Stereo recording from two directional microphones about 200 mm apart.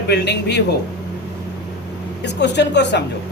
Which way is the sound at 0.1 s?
55° left (ahead or behind).